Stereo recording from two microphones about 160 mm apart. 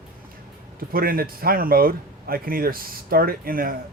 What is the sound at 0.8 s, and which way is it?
A man's voice, 65° right (ahead or behind).